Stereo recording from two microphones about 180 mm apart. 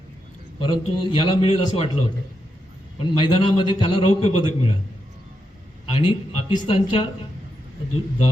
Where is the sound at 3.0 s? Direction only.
25° left (ahead or behind).